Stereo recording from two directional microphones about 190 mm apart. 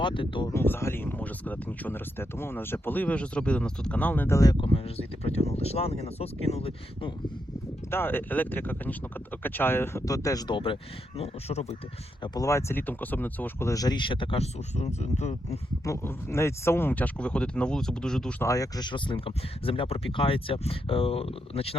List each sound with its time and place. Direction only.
0.0 s speech: 25° left (ahead or behind)
0.5 s speech: 10° left (ahead or behind); by 7.1 s 30° left (ahead or behind)
7.9 s speech: 10° left (ahead or behind); by 11.8 s 35° left (ahead or behind)
12.2 s speech: 20° left (ahead or behind); by 15.4 s 35° left (ahead or behind)
15.4 s speech: 15° left (ahead or behind)